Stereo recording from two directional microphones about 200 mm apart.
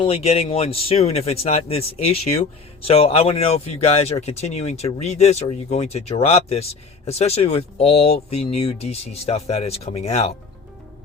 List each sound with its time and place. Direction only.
0.0 s speech: 30° left (ahead or behind)